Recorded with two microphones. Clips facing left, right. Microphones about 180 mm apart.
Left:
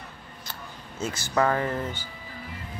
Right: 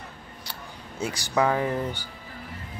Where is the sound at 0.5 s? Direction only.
15° right (ahead or behind).